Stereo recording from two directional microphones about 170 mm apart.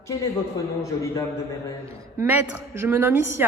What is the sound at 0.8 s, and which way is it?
Speech, 20° left (ahead or behind).